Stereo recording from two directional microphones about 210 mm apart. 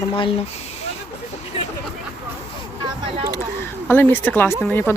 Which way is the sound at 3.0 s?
25° right (ahead or behind).